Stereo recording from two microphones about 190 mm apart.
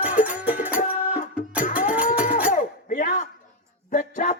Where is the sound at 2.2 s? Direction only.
40° left (ahead or behind).